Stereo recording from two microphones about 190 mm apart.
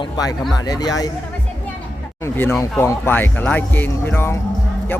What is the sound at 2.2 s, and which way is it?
Speech, 10° left (ahead or behind).